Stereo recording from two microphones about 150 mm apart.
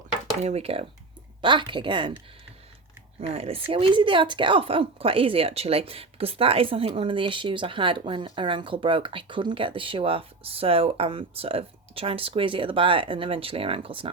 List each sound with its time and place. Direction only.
0.4 s speech: 40° right (ahead or behind)
3.2 s speech: 40° right (ahead or behind)